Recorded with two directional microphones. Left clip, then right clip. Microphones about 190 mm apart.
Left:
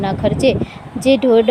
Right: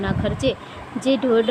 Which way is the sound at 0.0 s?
15° left (ahead or behind).